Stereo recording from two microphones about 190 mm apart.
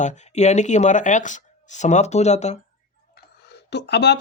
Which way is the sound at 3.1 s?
60° left (ahead or behind).